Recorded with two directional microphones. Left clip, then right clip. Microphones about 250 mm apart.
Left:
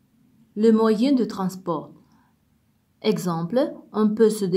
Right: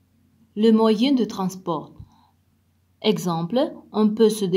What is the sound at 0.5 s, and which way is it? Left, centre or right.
Speech, centre.